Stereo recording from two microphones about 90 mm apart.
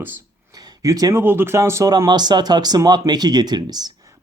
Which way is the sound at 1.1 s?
25° right (ahead or behind).